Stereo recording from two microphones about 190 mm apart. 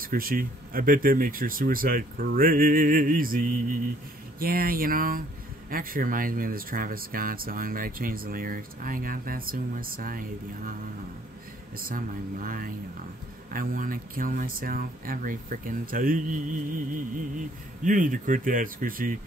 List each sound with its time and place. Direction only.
0.0 s speech: 50° right (ahead or behind)
11.8 s speech: 45° right (ahead or behind)